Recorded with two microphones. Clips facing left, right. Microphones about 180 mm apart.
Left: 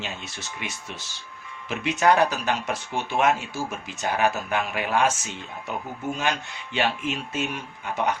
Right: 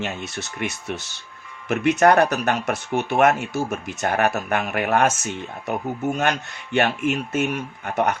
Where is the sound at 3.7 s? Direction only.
45° right (ahead or behind).